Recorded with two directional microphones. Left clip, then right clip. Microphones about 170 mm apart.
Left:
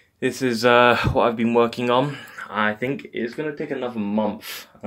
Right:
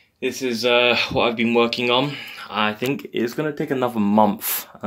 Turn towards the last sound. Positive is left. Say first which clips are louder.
# right 7 dB
turn(degrees=-40)  # may be behind; listen again after turning